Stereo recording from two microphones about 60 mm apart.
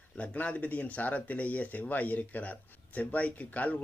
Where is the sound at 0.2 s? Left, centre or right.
Left.